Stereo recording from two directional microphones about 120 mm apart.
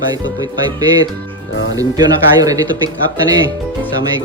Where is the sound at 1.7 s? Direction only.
30° right (ahead or behind).